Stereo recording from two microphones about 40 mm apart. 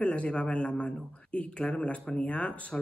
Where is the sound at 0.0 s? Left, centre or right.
Left.